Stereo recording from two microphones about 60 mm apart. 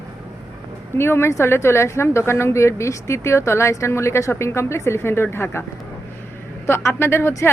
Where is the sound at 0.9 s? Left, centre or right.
Left.